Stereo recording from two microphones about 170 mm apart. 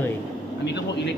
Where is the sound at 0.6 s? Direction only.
90° left.